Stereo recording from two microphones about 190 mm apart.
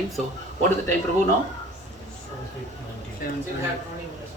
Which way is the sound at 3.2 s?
50° left (ahead or behind).